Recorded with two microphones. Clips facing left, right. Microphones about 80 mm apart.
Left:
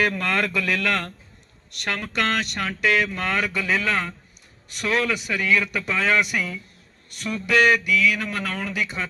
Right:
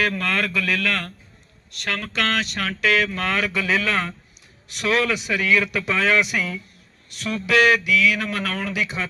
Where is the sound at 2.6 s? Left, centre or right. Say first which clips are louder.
Right 1 dB; centre.